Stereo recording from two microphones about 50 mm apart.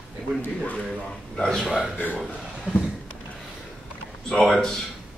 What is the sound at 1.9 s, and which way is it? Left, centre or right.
Speech, left.